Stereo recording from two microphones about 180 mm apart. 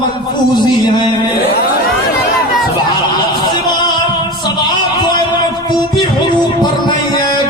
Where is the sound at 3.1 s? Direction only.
25° left (ahead or behind).